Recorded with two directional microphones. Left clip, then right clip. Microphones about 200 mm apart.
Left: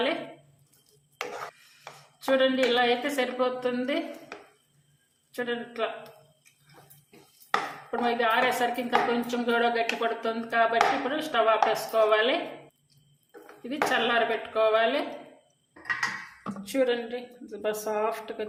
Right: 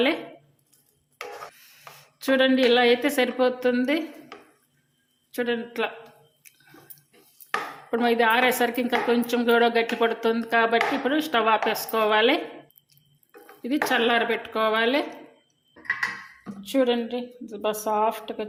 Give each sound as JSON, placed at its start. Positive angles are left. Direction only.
{"t": 2.1, "sound": "a woman's voice", "side_deg": -50}
{"t": 5.3, "sound": "a woman's voice", "side_deg": -50}
{"t": 7.9, "sound": "a woman's voice", "side_deg": -50}
{"t": 13.6, "sound": "a woman's voice", "side_deg": -50}
{"t": 16.6, "sound": "a woman's voice", "side_deg": -30}